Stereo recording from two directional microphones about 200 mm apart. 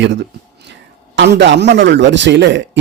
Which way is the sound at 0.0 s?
60° right (ahead or behind).